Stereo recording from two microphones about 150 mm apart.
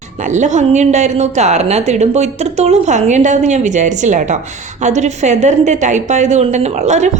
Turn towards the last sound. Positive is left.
turn(degrees=-50)  # may be behind; listen again after turning